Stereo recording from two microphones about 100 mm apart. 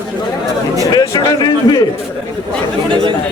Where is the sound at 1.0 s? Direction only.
40° left (ahead or behind).